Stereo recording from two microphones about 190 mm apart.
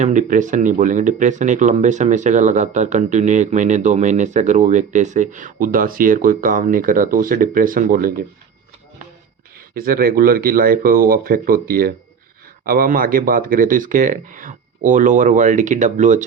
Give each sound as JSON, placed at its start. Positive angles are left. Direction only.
{"t": 0.0, "sound": "speech", "side_deg": -40}
{"t": 9.7, "sound": "speech", "side_deg": -50}